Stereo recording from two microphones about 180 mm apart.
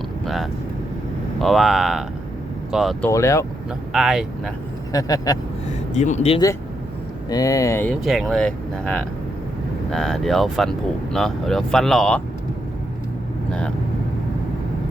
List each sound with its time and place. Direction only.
1.4 s speech: centre (ahead or behind)
3.0 s speech: 15° left (ahead or behind)
3.9 s speech: centre (ahead or behind)
4.9 s speech: 20° left (ahead or behind)
5.9 s speech: 40° left (ahead or behind)
7.3 s speech: 20° left (ahead or behind)
8.0 s speech: centre (ahead or behind)